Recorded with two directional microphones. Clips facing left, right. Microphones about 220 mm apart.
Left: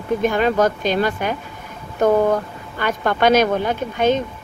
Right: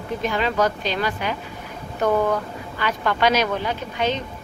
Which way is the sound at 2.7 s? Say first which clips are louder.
Left 3 dB; 50° left (ahead or behind).